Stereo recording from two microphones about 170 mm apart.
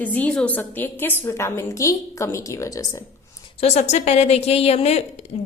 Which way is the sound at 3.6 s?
40° left (ahead or behind).